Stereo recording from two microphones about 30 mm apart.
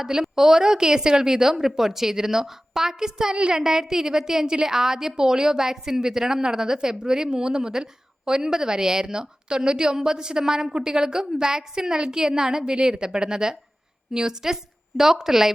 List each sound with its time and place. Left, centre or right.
0.0 s a woman's voice: centre